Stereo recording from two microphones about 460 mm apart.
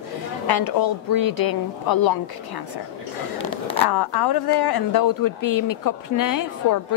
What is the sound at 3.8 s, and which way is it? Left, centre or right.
Speech, left.